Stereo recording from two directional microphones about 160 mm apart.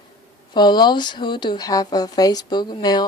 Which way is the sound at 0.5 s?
25° left (ahead or behind).